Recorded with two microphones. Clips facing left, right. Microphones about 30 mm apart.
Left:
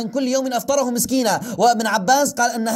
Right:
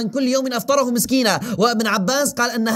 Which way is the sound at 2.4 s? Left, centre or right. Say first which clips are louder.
Even; right.